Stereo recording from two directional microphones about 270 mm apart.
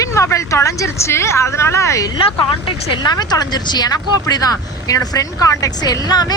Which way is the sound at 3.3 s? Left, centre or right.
Centre.